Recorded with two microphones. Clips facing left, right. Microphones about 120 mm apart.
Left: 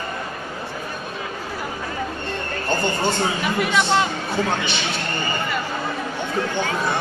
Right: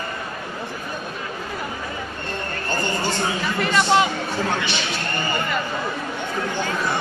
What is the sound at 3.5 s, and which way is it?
Speech, 5° left (ahead or behind).